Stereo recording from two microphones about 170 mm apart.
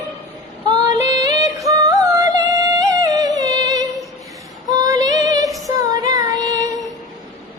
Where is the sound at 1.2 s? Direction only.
20° right (ahead or behind).